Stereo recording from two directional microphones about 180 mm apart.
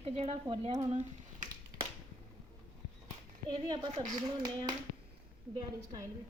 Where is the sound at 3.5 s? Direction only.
25° right (ahead or behind).